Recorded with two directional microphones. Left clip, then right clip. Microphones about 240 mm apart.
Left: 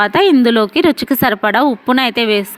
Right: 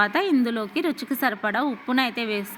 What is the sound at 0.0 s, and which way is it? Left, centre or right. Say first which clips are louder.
A woman's voice: left 11 dB; left.